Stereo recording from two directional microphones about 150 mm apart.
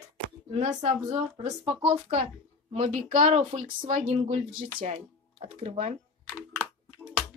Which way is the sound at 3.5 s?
40° right (ahead or behind).